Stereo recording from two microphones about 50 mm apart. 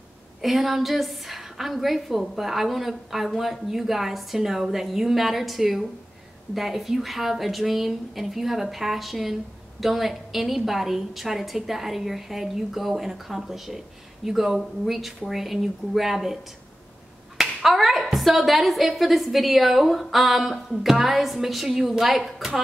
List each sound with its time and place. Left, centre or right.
0.4 s a woman's voice: centre
17.6 s a woman's voice: centre